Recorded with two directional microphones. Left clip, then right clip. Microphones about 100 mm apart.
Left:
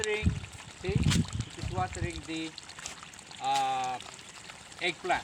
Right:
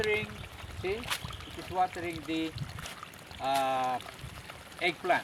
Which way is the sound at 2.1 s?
25° left (ahead or behind).